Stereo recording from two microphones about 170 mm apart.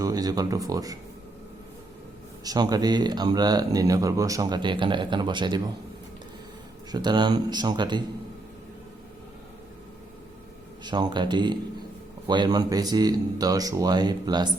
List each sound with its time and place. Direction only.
0.0 s speech: 20° right (ahead or behind)
2.4 s speech: 20° right (ahead or behind)
6.9 s speech: 25° right (ahead or behind)
10.8 s speech: 25° right (ahead or behind)